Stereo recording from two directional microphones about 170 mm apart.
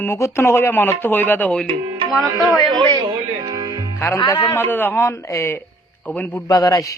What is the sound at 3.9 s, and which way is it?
A man's voice, 15° left (ahead or behind).